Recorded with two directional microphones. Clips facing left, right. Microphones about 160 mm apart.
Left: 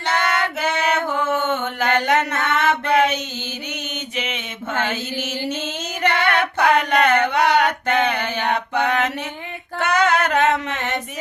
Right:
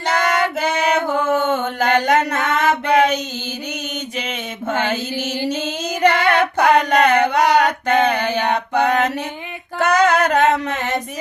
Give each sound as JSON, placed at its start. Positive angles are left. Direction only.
{"t": 0.0, "sound": "female singing", "side_deg": -40}
{"t": 0.8, "sound": "mantra", "side_deg": -40}
{"t": 4.2, "sound": "mantra", "side_deg": -40}
{"t": 5.5, "sound": "female singing", "side_deg": -40}
{"t": 8.7, "sound": "mantra", "side_deg": -40}
{"t": 9.7, "sound": "female singing", "side_deg": -40}